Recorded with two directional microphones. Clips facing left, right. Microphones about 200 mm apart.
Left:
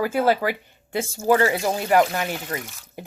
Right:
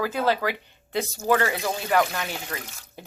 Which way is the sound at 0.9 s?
40° left (ahead or behind).